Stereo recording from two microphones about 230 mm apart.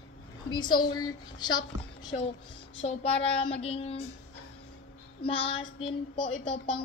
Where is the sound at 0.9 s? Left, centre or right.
Centre.